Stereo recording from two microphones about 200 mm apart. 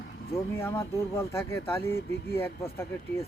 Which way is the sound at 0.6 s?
15° left (ahead or behind).